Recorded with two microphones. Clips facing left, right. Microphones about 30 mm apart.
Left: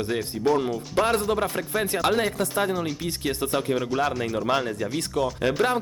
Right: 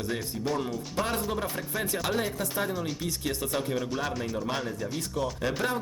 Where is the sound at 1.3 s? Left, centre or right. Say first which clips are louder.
Left 7 dB; left.